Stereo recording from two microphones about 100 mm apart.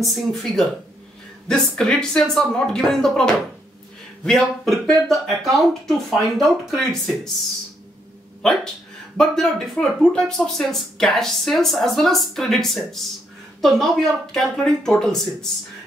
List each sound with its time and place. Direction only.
0.1 s speech: 5° left (ahead or behind)
9.1 s speech: 5° left (ahead or behind)